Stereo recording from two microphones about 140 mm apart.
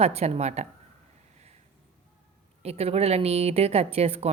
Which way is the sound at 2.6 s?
45° right (ahead or behind).